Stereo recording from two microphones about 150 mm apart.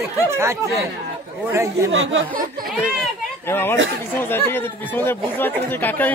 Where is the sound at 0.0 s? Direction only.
20° right (ahead or behind).